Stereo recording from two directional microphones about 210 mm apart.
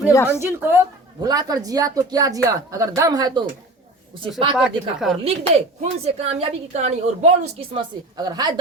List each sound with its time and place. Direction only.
0.3 s a woman's voice: 10° right (ahead or behind)
4.5 s speech: 5° right (ahead or behind)
5.2 s a woman's voice: 30° right (ahead or behind)